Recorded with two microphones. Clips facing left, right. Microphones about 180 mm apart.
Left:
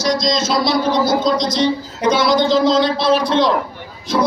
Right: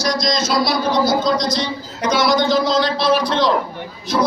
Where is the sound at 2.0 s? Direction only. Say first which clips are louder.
Left 1 dB; 30° left (ahead or behind).